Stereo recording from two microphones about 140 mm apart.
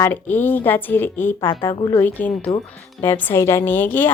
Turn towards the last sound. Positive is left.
turn(degrees=15)  # may be behind; listen again after turning